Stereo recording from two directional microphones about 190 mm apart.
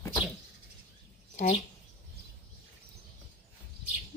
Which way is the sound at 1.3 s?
40° left (ahead or behind).